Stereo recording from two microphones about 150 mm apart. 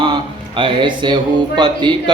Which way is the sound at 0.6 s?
35° right (ahead or behind).